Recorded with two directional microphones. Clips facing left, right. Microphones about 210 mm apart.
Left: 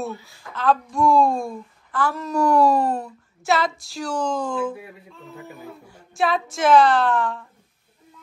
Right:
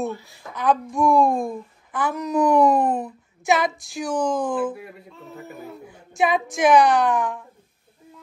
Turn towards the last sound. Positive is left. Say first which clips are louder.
# even
turn(degrees=-15)  # may be behind; listen again after turning